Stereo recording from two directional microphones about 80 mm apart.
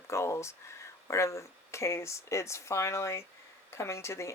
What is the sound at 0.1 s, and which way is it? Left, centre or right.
Speech, left.